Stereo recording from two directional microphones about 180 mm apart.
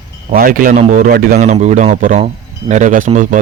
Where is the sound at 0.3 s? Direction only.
50° right (ahead or behind).